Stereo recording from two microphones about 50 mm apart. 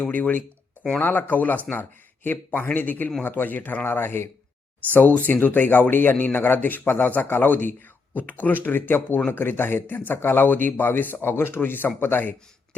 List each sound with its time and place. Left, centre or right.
0.0 s speech: left
3.8 s speech: left